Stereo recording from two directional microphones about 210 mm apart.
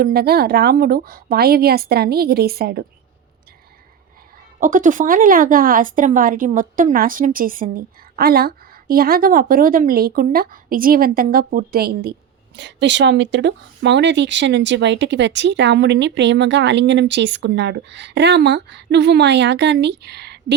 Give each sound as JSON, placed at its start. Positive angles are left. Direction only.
{"t": 0.0, "sound": "a woman's voice", "side_deg": -45}
{"t": 4.6, "sound": "a woman's voice", "side_deg": -40}